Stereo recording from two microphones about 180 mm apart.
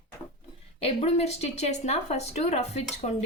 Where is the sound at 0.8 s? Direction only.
35° left (ahead or behind).